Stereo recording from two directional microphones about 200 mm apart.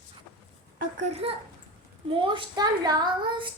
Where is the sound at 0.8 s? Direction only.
40° right (ahead or behind).